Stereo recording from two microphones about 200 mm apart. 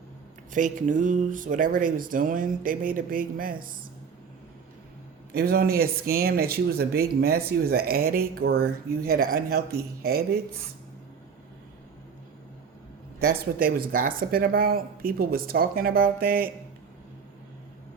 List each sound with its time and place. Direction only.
0.5 s speech: 40° right (ahead or behind)
5.3 s speech: 50° right (ahead or behind)
13.4 s speech: 50° right (ahead or behind)